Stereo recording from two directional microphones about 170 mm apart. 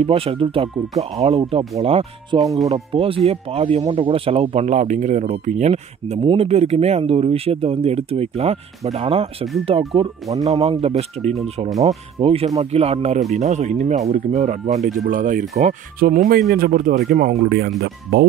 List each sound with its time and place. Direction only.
0.0 s speech: 35° right (ahead or behind)
1.5 s speech: 25° right (ahead or behind)
1.8 s speech: 35° right (ahead or behind)
15.0 s speech: 50° right (ahead or behind); by 18.2 s 75° right (ahead or behind)